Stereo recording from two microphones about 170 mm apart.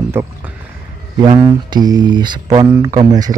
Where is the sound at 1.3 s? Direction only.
25° right (ahead or behind).